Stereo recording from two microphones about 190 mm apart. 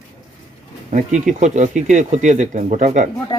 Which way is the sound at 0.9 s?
40° right (ahead or behind).